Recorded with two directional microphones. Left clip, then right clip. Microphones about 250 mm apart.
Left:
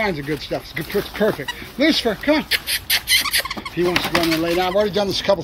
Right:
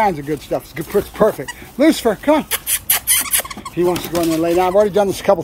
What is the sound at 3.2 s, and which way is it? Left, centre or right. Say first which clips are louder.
Fowl: left 2 dB; right.